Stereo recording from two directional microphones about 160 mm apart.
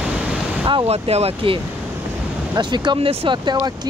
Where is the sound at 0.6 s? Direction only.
35° right (ahead or behind).